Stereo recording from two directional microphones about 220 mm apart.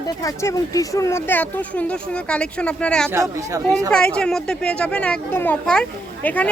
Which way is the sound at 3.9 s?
5° left (ahead or behind).